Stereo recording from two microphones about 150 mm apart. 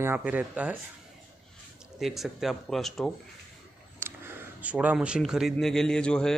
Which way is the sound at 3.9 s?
15° right (ahead or behind).